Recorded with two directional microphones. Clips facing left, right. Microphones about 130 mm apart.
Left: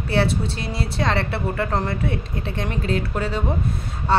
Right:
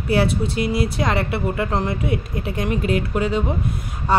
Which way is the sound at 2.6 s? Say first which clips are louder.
Right 4 dB; 15° right (ahead or behind).